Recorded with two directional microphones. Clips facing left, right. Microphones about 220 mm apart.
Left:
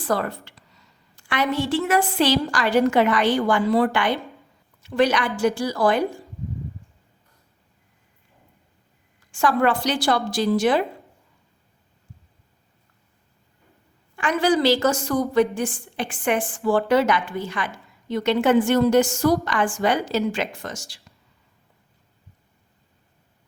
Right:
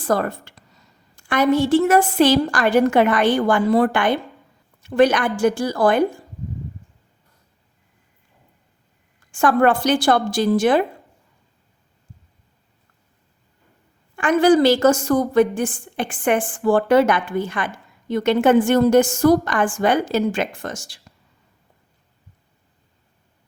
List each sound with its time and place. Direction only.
0.0 s a woman's voice: 45° right (ahead or behind)
9.3 s a woman's voice: 50° right (ahead or behind)
14.2 s a woman's voice: 50° right (ahead or behind)